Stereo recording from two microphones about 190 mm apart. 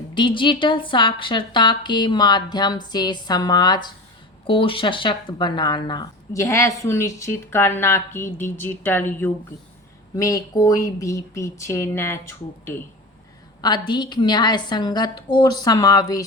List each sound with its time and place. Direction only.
0.1 s a woman's voice: 25° left (ahead or behind)